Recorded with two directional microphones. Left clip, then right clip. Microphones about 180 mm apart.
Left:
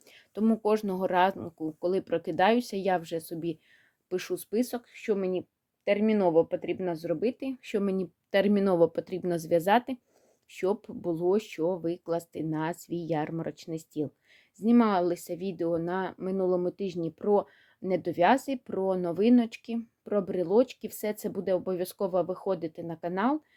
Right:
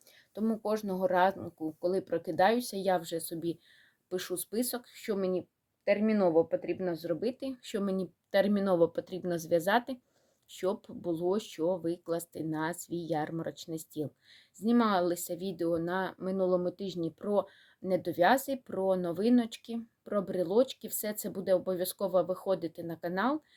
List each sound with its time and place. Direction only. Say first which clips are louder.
0.3 s speech: left 6 dB; 55° left (ahead or behind)